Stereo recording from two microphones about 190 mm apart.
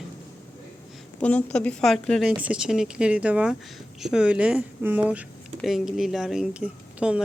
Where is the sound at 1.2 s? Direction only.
5° left (ahead or behind).